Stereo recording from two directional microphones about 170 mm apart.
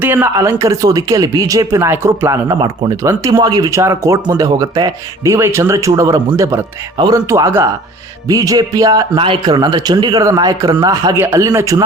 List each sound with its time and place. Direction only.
0.0 s speech: 15° right (ahead or behind)